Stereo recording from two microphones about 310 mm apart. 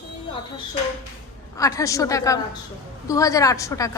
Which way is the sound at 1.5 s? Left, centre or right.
Centre.